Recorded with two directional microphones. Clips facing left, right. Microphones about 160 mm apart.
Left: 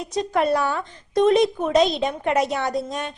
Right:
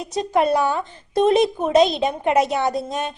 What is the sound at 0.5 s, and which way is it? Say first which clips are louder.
A woman's voice: right 2 dB; 20° right (ahead or behind).